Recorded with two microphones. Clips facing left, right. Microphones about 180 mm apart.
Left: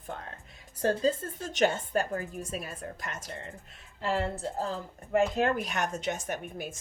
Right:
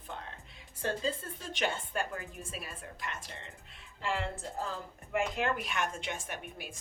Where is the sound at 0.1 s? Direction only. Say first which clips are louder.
Left 1 dB; 45° left (ahead or behind).